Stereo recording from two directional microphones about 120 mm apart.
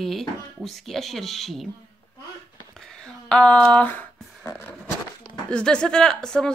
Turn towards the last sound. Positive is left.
turn(degrees=5)  # may be behind; listen again after turning